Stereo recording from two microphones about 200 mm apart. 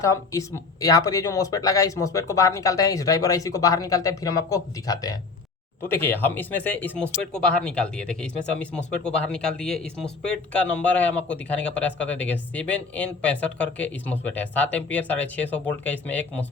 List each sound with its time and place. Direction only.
0.0 s speech: 15° left (ahead or behind)